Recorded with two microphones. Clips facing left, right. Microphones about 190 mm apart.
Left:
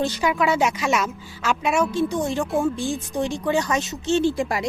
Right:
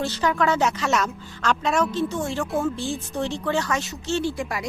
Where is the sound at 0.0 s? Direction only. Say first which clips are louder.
Left 1 dB; 10° left (ahead or behind).